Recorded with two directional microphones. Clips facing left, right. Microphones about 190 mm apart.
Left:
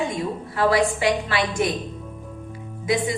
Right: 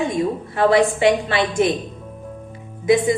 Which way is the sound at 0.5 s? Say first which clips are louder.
Right 4 dB; 25° right (ahead or behind).